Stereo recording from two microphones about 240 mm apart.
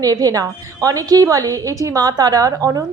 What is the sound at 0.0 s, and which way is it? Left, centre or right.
A woman's voice, centre.